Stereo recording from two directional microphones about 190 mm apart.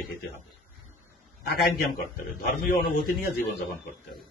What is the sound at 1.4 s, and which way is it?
A man's voice, 50° left (ahead or behind).